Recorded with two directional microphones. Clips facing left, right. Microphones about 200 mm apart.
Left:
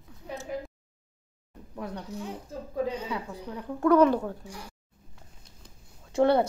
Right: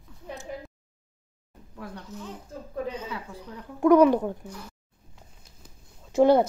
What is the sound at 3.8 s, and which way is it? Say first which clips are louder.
Speech: right 3 dB; 15° right (ahead or behind).